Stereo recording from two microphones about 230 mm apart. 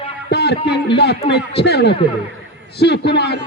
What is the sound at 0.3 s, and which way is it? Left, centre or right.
Speech, left.